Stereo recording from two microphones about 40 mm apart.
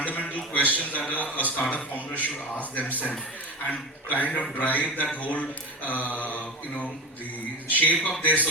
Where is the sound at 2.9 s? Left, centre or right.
Right.